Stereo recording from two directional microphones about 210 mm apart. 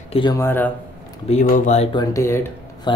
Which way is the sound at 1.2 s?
35° left (ahead or behind).